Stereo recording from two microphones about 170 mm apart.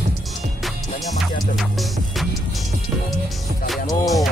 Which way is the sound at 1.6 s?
Centre (ahead or behind).